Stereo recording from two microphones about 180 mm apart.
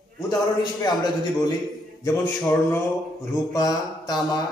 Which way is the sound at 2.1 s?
15° left (ahead or behind).